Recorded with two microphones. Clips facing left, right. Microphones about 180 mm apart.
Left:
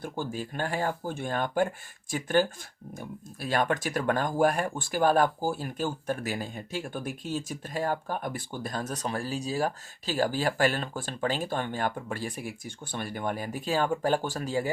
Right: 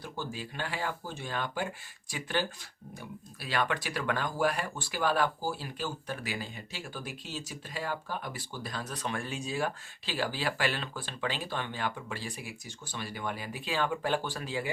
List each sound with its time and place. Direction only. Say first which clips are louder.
0.0 s speech: left 5 dB; 50° left (ahead or behind)